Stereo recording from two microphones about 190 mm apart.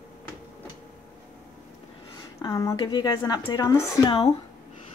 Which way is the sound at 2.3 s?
15° left (ahead or behind).